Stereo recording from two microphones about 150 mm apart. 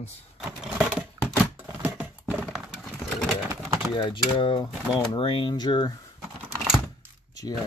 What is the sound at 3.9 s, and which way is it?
Speech, 35° left (ahead or behind).